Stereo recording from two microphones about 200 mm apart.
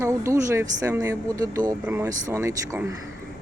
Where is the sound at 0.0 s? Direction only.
15° right (ahead or behind).